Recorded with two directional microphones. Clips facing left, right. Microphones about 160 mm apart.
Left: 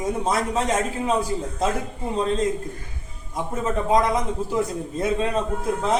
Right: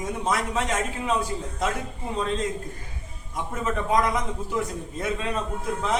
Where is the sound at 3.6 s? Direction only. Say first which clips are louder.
Left 3 dB; 30° left (ahead or behind).